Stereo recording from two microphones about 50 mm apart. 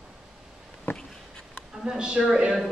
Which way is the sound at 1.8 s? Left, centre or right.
Centre.